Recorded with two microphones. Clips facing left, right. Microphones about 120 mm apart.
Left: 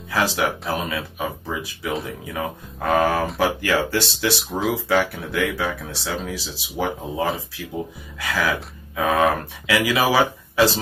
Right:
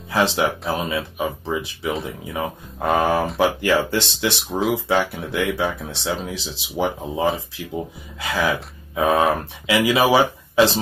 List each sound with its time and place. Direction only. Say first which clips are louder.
0.1 s speech: right 2 dB; 25° right (ahead or behind)